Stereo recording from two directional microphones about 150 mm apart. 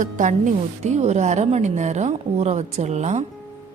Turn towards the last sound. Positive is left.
turn(degrees=-50)  # may be behind; listen again after turning